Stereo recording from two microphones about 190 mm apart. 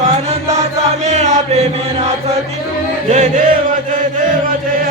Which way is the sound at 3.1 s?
35° right (ahead or behind).